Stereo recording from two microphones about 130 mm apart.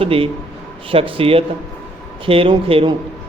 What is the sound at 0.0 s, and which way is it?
A man's voice, 45° right (ahead or behind).